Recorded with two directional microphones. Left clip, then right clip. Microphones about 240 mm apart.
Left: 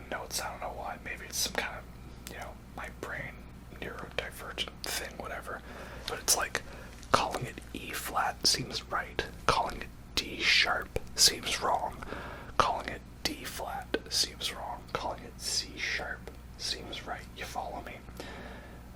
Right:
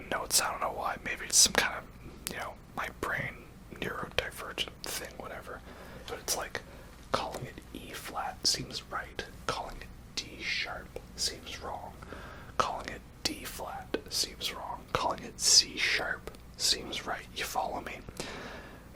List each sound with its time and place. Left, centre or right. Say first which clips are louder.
0.1 s whispering: right 6 dB; right
4.4 s whispering: right 1 dB; centre
4.9 s whispering: left 3 dB; centre
7.1 s whispering: left 5 dB; centre; by 11.8 s left
12.1 s whispering: left 2 dB; left; by 13.0 s centre
13.2 s whispering: left 1 dB; centre
14.9 s whispering: right 6 dB; right